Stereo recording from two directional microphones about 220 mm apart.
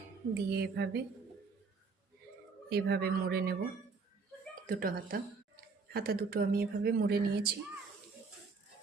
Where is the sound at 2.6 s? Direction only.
45° right (ahead or behind).